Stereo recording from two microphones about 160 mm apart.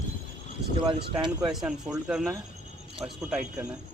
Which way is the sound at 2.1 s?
5° right (ahead or behind).